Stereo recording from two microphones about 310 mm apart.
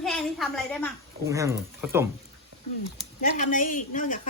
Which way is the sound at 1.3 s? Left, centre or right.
Centre.